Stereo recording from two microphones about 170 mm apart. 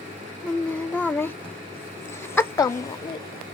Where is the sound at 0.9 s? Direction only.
10° left (ahead or behind).